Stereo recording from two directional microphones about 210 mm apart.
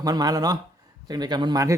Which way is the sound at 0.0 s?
20° right (ahead or behind).